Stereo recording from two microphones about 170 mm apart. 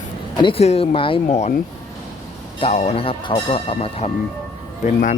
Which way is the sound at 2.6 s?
40° left (ahead or behind).